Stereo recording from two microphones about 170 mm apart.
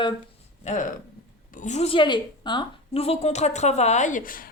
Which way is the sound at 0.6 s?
45° left (ahead or behind).